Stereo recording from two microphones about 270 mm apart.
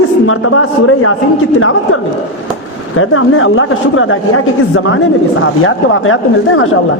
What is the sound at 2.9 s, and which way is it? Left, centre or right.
A woman's voice, left.